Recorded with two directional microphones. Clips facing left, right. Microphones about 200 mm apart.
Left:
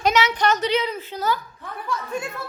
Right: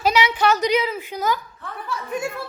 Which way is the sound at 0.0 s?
10° right (ahead or behind).